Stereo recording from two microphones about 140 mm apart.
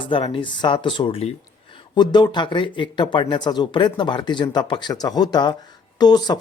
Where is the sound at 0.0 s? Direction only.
40° left (ahead or behind).